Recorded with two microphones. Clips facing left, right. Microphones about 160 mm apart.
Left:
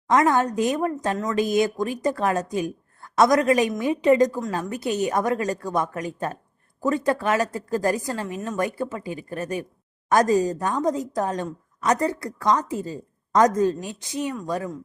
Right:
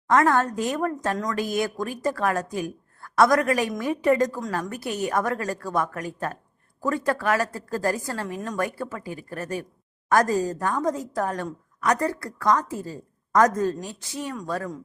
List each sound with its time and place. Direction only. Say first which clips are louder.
0.1 s a woman's voice: left 1 dB; 20° left (ahead or behind)